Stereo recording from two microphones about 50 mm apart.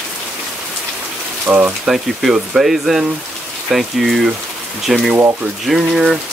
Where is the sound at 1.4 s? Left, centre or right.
Right.